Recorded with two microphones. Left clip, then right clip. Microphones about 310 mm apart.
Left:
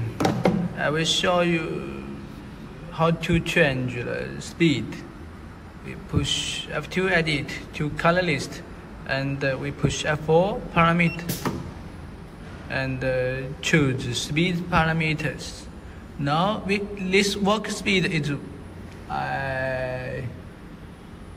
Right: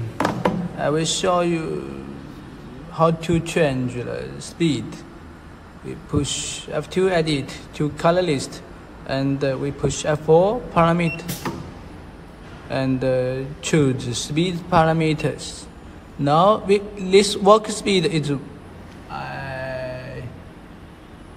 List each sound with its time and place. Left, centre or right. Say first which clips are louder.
0.7 s speech: right 1 dB; centre
2.9 s speech: right 4 dB; centre
12.6 s speech: right 5 dB; centre
19.0 s a sound: left 3 dB; centre